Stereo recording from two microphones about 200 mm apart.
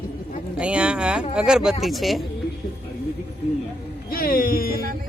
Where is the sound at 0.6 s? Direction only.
5° right (ahead or behind).